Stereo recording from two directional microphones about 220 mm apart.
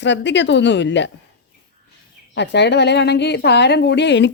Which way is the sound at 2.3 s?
50° left (ahead or behind).